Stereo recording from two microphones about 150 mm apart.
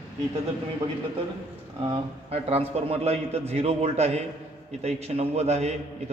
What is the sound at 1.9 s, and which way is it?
A man's voice, 40° right (ahead or behind).